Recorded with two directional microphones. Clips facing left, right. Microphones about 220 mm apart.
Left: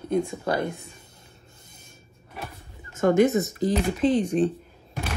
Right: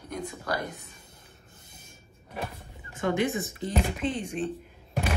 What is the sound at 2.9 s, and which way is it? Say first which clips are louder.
Speech: left 8 dB; 45° left (ahead or behind).